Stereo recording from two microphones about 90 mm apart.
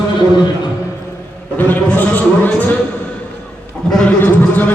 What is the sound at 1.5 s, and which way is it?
A man's voice, 20° left (ahead or behind).